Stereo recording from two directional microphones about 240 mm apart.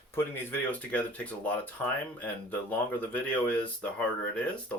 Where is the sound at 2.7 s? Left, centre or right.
Centre.